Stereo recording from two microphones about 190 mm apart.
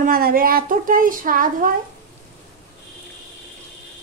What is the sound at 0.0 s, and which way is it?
A woman's voice, 50° right (ahead or behind).